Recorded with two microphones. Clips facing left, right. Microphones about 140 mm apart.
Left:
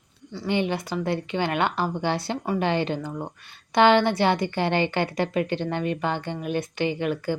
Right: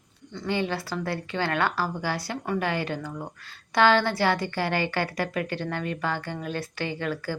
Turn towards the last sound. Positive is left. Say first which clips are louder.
# left 5 dB
turn(degrees=20)  # may be behind; listen again after turning